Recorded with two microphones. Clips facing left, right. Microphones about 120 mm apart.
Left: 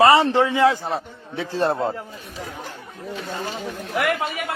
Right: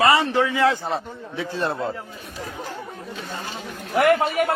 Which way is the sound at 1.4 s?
35° left (ahead or behind).